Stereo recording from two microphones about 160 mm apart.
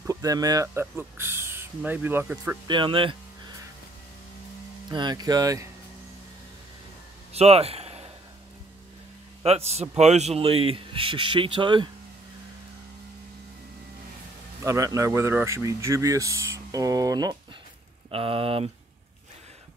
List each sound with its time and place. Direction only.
0.0 s speech: 20° right (ahead or behind)
2.7 s a man's voice: 30° right (ahead or behind)
4.8 s speech: 25° right (ahead or behind)
7.3 s a sound: 40° right (ahead or behind)
9.4 s a man's voice: 40° right (ahead or behind)
14.6 s speech: 20° right (ahead or behind)
18.1 s a man's voice: 35° right (ahead or behind)